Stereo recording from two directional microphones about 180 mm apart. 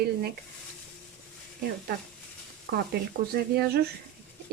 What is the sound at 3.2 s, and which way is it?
Speech, 60° right (ahead or behind).